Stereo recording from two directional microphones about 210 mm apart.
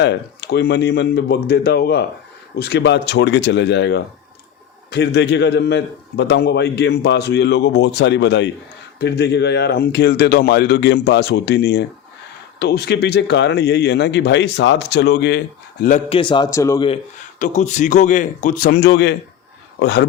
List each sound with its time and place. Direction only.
0.0 s a man's voice: 55° left (ahead or behind)
16.0 s a man's voice: 25° left (ahead or behind)
17.4 s speech: 35° left (ahead or behind); by 20.1 s 50° left (ahead or behind)